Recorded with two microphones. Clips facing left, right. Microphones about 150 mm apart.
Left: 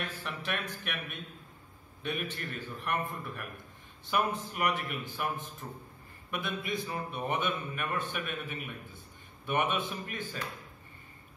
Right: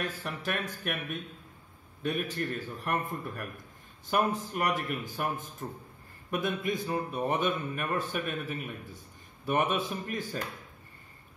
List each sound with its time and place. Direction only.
0.2 s a man's voice: 45° right (ahead or behind)
2.0 s a man's voice: 40° right (ahead or behind)